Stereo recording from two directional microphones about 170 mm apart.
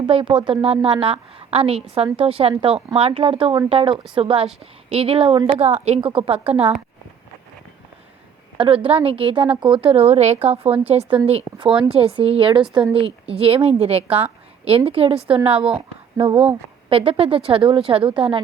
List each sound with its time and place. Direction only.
0.1 s a woman's voice: 35° right (ahead or behind)
8.5 s a woman's voice: 30° right (ahead or behind)